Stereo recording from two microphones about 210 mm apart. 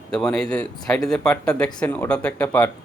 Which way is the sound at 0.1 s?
5° left (ahead or behind).